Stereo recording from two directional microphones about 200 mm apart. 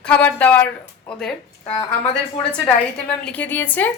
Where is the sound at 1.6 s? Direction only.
25° left (ahead or behind).